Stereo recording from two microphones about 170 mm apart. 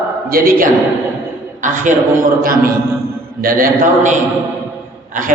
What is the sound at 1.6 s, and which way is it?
A man's voice, 50° right (ahead or behind).